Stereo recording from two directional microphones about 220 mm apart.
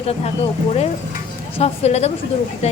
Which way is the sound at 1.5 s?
30° left (ahead or behind).